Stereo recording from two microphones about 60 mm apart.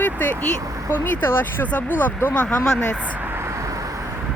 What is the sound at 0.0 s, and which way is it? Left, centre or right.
Speech, left.